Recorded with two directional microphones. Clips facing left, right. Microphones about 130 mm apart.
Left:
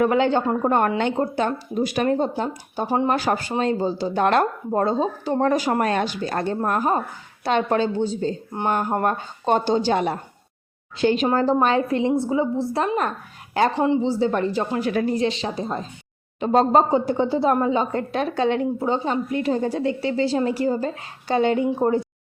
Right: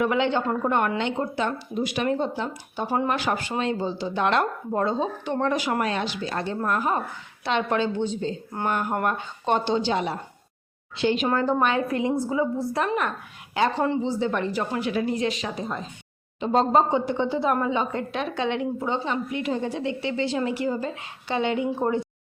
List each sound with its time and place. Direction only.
0.0 s a woman's voice: 40° left (ahead or behind)
2.8 s a woman's voice: 25° left (ahead or behind)
3.1 s a woman's voice: 40° left (ahead or behind)
11.6 s a woman's voice: 30° left (ahead or behind)
13.0 s speech: 40° left (ahead or behind)
13.7 s speech: 15° left (ahead or behind)
14.0 s a woman's voice: 30° left (ahead or behind)
14.8 s a woman's voice: 45° left (ahead or behind)
16.4 s a woman's voice: 45° left (ahead or behind)